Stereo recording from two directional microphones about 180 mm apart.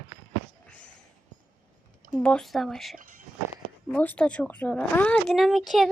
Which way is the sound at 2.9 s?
50° right (ahead or behind).